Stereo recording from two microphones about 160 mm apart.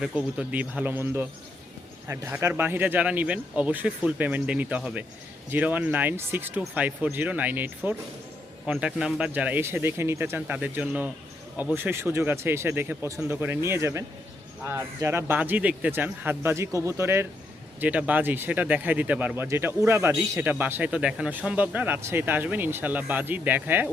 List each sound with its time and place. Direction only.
0.0 s speech: 5° right (ahead or behind)